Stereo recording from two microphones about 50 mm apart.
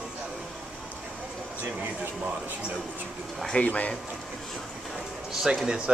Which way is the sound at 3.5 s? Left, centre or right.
Left.